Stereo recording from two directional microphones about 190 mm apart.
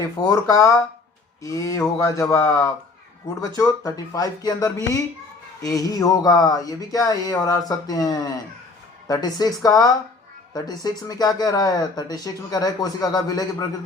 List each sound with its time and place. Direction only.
0.0 s speech: 15° left (ahead or behind)